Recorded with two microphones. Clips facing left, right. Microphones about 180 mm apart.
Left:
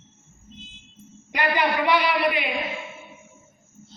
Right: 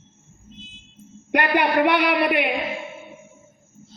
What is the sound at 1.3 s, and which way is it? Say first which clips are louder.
A man's voice: right 3 dB; 60° right (ahead or behind).